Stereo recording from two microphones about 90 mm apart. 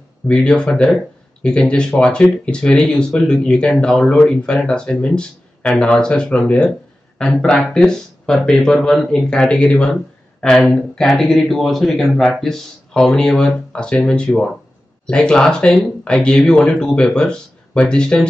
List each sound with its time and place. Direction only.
0.3 s speech: 10° left (ahead or behind)